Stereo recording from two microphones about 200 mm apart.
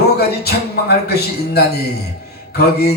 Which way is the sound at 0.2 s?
55° left (ahead or behind).